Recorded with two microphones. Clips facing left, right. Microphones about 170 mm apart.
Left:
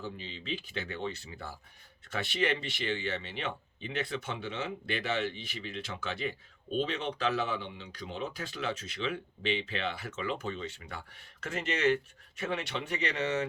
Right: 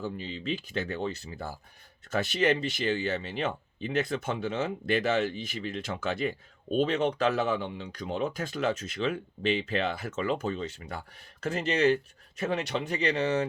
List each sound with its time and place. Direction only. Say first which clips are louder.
0.0 s speech: right 7 dB; 45° right (ahead or behind)